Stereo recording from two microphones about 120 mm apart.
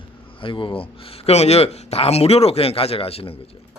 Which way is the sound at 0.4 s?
45° left (ahead or behind).